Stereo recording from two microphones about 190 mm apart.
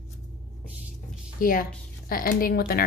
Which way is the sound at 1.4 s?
50° left (ahead or behind).